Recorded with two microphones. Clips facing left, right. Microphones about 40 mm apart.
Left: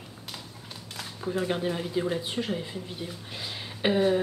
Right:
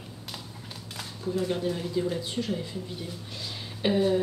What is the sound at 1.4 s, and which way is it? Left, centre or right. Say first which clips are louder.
Speech: left 1 dB; left.